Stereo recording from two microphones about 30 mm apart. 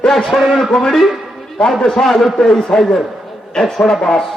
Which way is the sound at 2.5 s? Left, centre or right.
Centre.